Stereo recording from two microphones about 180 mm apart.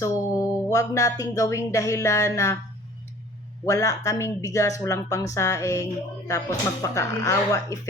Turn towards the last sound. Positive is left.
turn(degrees=15)  # may be behind; listen again after turning